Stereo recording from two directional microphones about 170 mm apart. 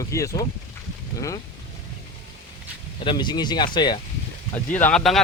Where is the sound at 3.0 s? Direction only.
25° left (ahead or behind).